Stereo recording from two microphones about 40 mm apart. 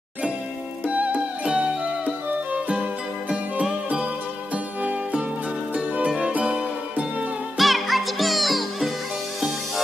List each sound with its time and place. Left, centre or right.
0.8 s music: right
3.6 s music: right
5.9 s music: right
7.5 s music: centre